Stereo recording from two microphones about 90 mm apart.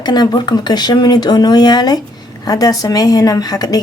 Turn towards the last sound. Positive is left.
turn(degrees=45)  # may be behind; listen again after turning